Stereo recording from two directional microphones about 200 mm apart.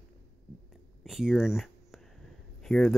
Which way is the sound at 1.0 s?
Centre (ahead or behind).